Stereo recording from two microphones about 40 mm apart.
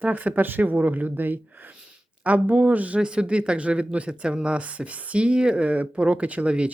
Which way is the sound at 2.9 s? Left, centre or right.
Right.